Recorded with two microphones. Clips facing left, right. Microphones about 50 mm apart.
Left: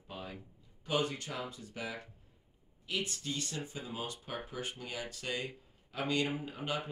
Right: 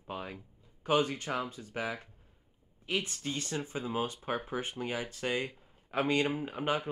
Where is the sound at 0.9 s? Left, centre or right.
Right.